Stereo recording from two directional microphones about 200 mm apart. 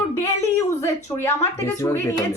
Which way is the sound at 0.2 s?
15° left (ahead or behind).